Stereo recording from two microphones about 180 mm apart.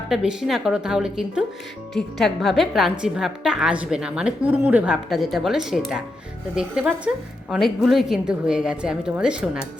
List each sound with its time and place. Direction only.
0.1 s a woman's voice: 5° right (ahead or behind)